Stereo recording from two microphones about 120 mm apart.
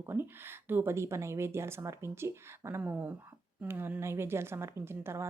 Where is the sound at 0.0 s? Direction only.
20° right (ahead or behind).